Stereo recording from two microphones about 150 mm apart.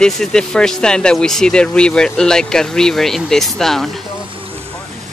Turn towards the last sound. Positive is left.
turn(degrees=0)  # may be behind; listen again after turning